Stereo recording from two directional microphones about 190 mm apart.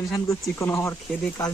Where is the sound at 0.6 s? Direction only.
15° left (ahead or behind).